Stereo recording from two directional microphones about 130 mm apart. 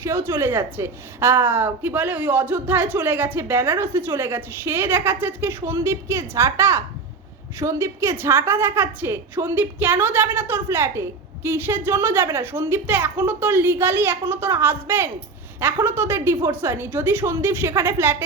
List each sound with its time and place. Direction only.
0.0 s a woman's voice: 20° right (ahead or behind)